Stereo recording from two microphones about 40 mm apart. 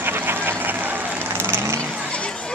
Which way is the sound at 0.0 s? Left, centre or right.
Right.